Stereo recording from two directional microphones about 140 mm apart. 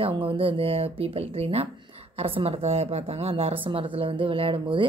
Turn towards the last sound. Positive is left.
turn(degrees=-40)  # may be behind; listen again after turning